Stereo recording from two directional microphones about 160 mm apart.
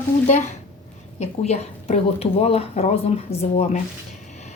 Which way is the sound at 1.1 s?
40° left (ahead or behind).